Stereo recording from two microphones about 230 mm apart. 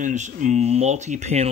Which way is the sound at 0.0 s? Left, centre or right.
Right.